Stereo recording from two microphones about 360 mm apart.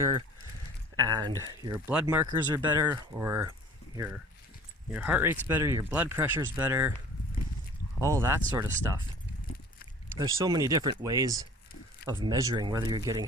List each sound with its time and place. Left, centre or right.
0.9 s speech: centre
8.0 s speech: centre
10.2 s speech: centre